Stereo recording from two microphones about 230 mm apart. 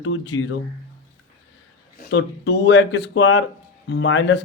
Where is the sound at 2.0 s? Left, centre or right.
Left.